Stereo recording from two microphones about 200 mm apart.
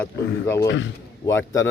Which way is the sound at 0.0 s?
10° left (ahead or behind).